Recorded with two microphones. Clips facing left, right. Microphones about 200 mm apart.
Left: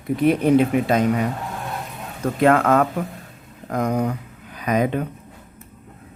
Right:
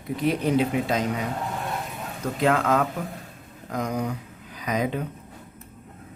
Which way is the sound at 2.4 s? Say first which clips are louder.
Left 6 dB; 55° left (ahead or behind).